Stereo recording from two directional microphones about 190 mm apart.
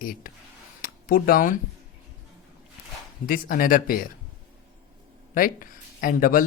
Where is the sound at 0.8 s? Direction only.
50° left (ahead or behind).